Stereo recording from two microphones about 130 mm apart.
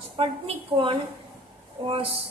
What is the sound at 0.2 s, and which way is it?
A woman's voice, 45° right (ahead or behind).